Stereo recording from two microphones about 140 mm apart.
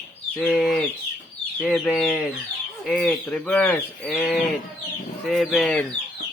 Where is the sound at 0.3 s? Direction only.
5° left (ahead or behind).